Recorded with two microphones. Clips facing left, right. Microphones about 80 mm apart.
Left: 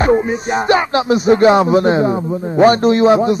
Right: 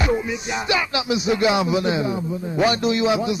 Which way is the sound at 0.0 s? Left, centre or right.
Left.